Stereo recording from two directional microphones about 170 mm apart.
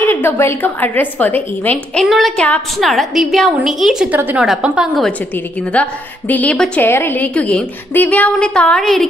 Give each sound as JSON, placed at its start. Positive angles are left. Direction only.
{"t": 0.0, "sound": "a woman's voice", "side_deg": 10}
{"t": 2.0, "sound": "a woman's voice", "side_deg": 0}
{"t": 5.7, "sound": "a woman's voice", "side_deg": 10}